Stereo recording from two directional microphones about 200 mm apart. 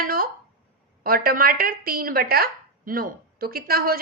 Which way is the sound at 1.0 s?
45° right (ahead or behind).